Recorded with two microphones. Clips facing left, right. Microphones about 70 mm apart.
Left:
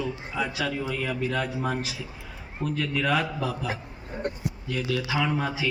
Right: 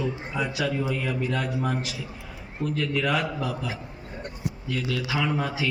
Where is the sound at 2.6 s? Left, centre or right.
Centre.